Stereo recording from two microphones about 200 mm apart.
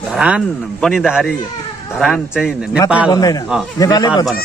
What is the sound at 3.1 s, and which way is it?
Speech, 20° left (ahead or behind).